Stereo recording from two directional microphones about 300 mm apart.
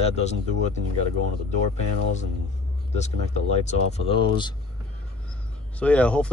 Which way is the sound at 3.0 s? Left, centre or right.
Left.